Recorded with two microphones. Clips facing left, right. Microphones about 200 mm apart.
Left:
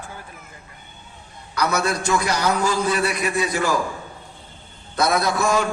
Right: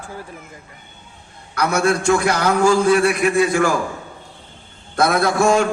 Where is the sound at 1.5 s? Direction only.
55° right (ahead or behind).